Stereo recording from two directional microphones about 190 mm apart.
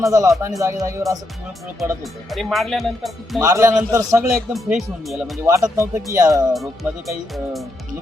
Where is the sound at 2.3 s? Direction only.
Centre (ahead or behind).